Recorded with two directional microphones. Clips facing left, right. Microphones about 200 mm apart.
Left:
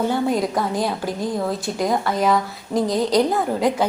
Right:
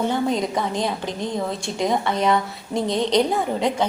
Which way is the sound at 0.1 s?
5° left (ahead or behind).